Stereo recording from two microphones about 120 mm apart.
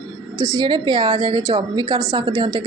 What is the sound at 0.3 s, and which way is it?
A woman's voice, 35° right (ahead or behind).